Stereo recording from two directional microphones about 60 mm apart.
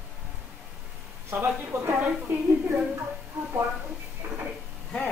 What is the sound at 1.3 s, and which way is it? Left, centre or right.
Speech, right.